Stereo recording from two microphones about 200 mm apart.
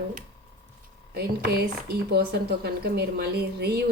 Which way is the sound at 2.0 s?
50° right (ahead or behind).